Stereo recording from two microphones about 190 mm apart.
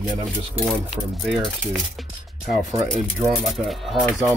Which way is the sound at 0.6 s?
Centre (ahead or behind).